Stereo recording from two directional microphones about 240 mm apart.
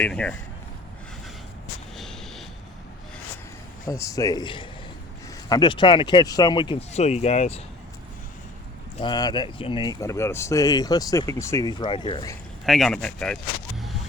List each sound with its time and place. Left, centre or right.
0.0 s speech: centre
2.0 s a sound: centre
3.8 s speech: centre
9.0 s speech: centre
12.6 s speech: centre